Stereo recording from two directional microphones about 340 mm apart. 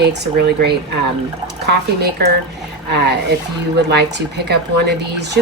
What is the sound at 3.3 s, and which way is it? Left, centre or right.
Speech, right.